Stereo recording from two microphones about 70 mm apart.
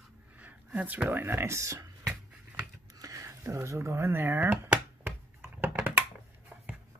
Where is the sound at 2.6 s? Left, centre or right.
Right.